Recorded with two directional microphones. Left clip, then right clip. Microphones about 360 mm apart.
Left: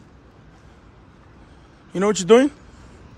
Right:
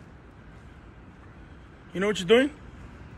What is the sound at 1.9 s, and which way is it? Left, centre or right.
Speech, centre.